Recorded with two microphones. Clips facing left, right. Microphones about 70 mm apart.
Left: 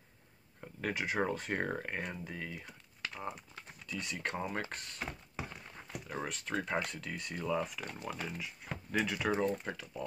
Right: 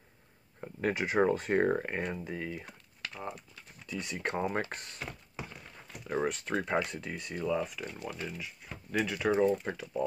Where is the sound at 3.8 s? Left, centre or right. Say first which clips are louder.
Right 3 dB; centre.